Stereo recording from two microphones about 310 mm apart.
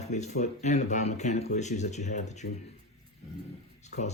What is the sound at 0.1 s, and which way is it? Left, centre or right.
Speech, left.